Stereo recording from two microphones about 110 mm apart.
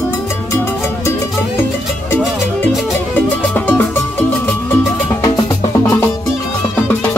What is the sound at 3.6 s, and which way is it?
Music, 15° left (ahead or behind).